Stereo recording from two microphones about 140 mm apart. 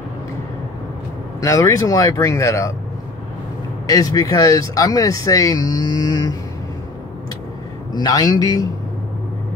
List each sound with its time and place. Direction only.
1.4 s speech: 20° left (ahead or behind)
3.8 s speech: 25° left (ahead or behind)
7.9 s speech: 30° left (ahead or behind)